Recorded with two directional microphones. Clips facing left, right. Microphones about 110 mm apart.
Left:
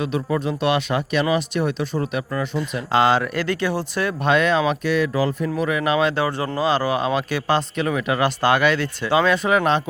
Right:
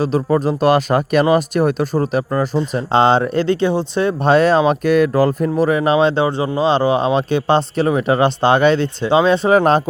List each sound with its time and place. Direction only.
0.0 s speech: 35° right (ahead or behind)